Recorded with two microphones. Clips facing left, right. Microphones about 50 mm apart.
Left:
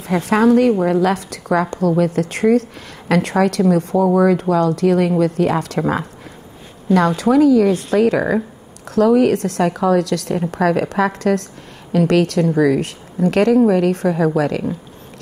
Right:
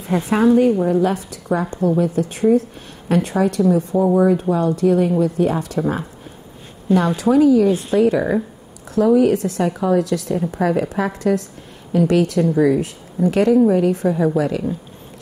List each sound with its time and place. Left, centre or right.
0.1 s a woman's voice: left
3.7 s speech: left
6.9 s a woman's voice: left